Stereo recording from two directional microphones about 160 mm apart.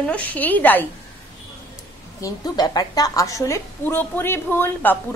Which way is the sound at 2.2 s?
20° left (ahead or behind).